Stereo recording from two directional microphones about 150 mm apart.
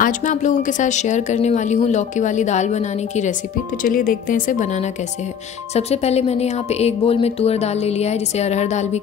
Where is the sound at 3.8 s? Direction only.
65° left (ahead or behind).